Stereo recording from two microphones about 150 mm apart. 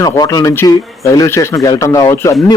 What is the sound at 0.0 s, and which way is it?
Speech, 25° left (ahead or behind).